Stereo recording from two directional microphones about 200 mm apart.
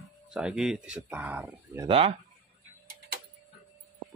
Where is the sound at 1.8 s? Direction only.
25° right (ahead or behind).